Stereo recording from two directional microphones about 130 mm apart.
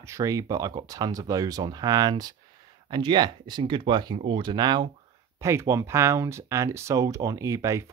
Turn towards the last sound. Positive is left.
turn(degrees=-25)  # may be behind; listen again after turning